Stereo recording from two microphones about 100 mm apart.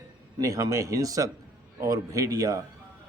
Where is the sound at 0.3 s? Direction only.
35° right (ahead or behind).